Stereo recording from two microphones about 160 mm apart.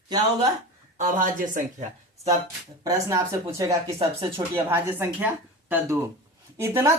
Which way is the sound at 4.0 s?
35° right (ahead or behind).